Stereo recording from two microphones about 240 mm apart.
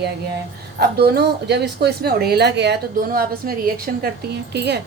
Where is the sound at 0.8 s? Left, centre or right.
Right.